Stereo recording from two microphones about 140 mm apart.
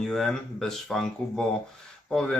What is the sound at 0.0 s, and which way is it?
Speech, 5° left (ahead or behind).